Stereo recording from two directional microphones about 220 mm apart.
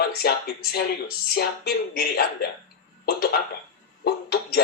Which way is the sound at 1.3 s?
45° left (ahead or behind).